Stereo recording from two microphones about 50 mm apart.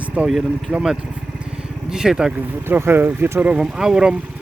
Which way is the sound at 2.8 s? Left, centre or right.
Right.